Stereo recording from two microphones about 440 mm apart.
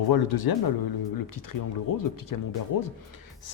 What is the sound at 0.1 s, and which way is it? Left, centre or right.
Speech, left.